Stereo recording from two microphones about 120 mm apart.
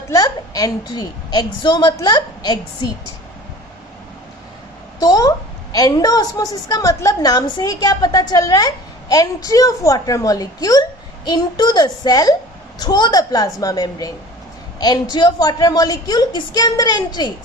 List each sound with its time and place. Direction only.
0.1 s a woman's voice: 30° left (ahead or behind)
4.9 s a sound: 30° left (ahead or behind)
5.7 s a woman's voice: 30° left (ahead or behind)